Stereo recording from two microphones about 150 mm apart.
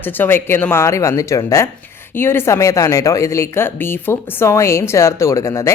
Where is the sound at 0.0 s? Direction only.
15° left (ahead or behind).